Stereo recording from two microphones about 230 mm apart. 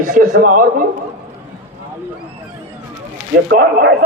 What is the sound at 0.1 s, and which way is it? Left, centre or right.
Speech, right.